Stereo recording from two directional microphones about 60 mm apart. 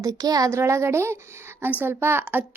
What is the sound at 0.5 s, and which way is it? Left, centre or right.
Speech, right.